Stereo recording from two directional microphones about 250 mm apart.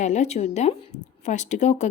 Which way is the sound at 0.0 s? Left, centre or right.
Left.